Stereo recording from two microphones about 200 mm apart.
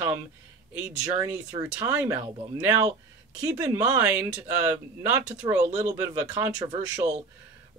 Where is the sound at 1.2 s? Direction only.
10° right (ahead or behind).